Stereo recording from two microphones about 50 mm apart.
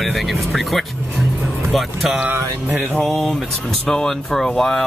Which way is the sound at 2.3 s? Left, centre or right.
Right.